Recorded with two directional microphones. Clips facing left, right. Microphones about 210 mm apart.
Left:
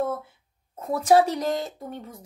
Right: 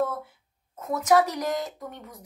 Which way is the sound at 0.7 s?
30° left (ahead or behind).